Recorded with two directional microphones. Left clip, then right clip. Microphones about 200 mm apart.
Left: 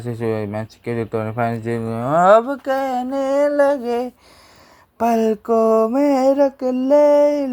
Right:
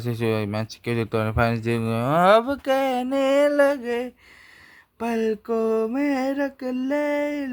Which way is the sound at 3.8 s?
10° left (ahead or behind).